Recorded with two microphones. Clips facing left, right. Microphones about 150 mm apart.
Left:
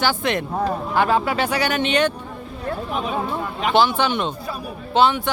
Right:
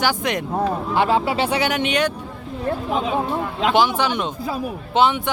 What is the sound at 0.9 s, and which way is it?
Speech, 25° right (ahead or behind).